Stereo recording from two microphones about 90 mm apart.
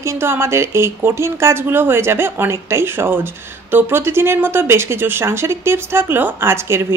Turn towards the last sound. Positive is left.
turn(degrees=-30)  # may be behind; listen again after turning